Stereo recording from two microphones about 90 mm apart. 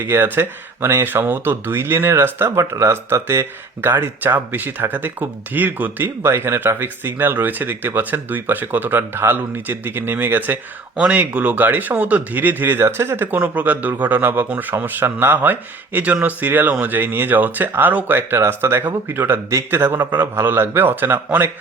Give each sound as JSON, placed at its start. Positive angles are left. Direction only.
{"t": 0.0, "sound": "speech", "side_deg": -20}